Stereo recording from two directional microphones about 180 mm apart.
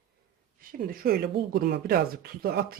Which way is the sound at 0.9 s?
55° right (ahead or behind).